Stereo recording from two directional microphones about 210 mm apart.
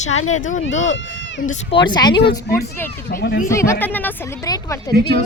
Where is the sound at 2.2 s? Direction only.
50° left (ahead or behind).